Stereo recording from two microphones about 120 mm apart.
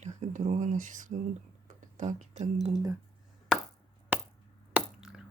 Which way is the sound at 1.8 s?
90° right.